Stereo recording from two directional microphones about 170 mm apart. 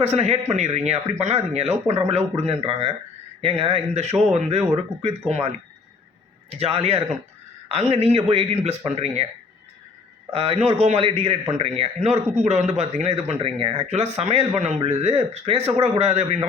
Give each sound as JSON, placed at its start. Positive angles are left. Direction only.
{"t": 0.0, "sound": "speech", "side_deg": -40}
{"t": 10.3, "sound": "speech", "side_deg": -35}